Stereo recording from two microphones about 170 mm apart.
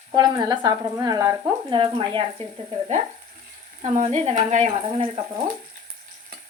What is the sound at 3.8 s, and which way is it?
Speech, 40° right (ahead or behind).